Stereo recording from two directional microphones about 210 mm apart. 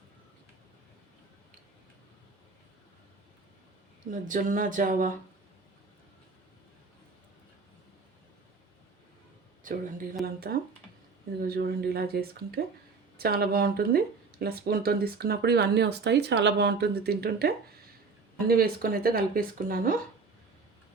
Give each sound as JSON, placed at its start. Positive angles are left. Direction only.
{"t": 4.1, "sound": "speech", "side_deg": -40}
{"t": 9.7, "sound": "speech", "side_deg": -40}